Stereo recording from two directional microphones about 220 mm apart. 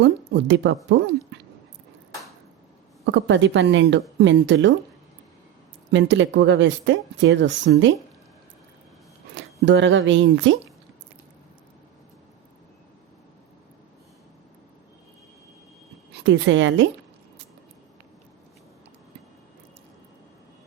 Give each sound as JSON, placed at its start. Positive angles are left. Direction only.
{"t": 0.0, "sound": "speech", "side_deg": -55}
{"t": 3.1, "sound": "speech", "side_deg": -55}
{"t": 5.9, "sound": "speech", "side_deg": -55}
{"t": 9.3, "sound": "speech", "side_deg": -55}
{"t": 16.1, "sound": "speech", "side_deg": -55}